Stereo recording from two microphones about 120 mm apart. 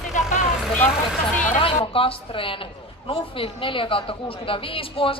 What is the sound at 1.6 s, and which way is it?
A woman's voice, 50° left (ahead or behind).